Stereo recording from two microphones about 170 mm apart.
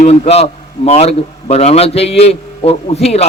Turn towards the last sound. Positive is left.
turn(degrees=40)  # may be behind; listen again after turning